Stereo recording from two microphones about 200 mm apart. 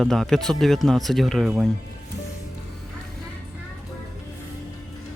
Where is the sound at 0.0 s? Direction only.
Centre (ahead or behind).